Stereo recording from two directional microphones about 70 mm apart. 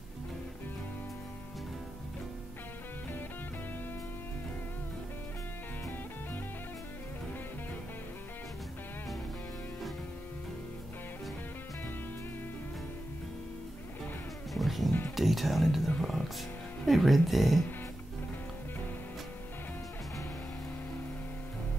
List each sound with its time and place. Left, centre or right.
14.5 s music: centre
14.9 s speech: left
15.1 s speech: centre
16.0 s music: centre
16.8 s speech: centre